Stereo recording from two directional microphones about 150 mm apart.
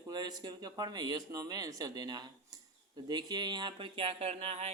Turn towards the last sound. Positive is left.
turn(degrees=-45)  # may be behind; listen again after turning